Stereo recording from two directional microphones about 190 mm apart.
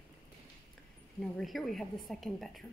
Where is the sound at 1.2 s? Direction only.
Centre (ahead or behind).